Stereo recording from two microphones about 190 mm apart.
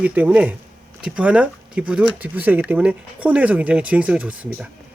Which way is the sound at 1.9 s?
5° right (ahead or behind).